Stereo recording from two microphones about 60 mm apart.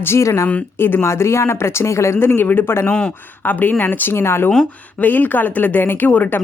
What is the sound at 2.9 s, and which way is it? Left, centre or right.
Speech, centre.